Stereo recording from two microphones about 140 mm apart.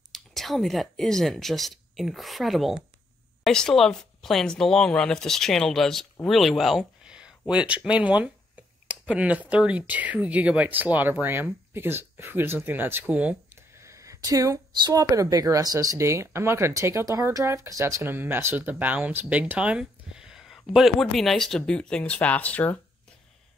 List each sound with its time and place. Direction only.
0.1 s speech: centre (ahead or behind)